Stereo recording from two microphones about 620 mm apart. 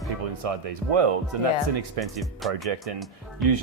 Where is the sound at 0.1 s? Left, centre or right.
Right.